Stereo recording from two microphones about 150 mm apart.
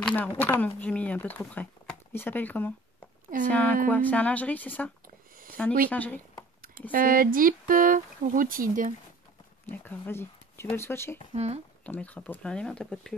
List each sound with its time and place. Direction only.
0.0 s speech: 10° left (ahead or behind)
6.9 s speech: 65° right (ahead or behind)
9.7 s speech: 15° left (ahead or behind)
11.3 s speech: 45° right (ahead or behind)
11.8 s speech: 10° left (ahead or behind)